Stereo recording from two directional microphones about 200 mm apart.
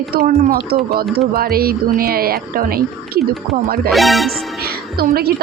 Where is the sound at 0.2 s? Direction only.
50° right (ahead or behind).